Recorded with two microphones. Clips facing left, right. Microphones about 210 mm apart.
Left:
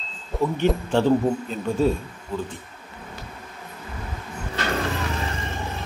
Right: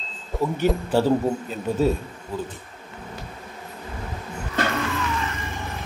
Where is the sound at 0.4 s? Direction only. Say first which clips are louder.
Left 1 dB; 5° right (ahead or behind).